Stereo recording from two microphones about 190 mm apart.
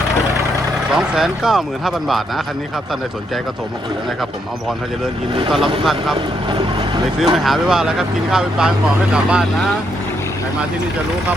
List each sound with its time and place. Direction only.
0.9 s speech: 5° right (ahead or behind)
5.8 s speech: centre (ahead or behind)
6.1 s speech: 25° right (ahead or behind)
7.3 s speech: centre (ahead or behind)